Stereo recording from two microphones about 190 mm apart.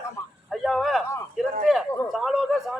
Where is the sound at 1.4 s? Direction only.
Centre (ahead or behind).